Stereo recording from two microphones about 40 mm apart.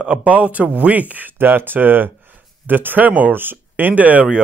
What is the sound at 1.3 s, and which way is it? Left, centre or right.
Speech, right.